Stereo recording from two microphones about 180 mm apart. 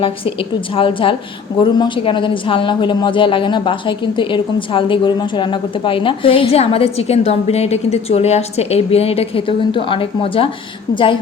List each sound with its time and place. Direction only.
0.0 s a woman's voice: 30° left (ahead or behind)